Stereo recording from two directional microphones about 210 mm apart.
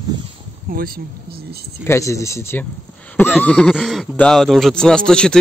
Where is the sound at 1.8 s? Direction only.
15° left (ahead or behind).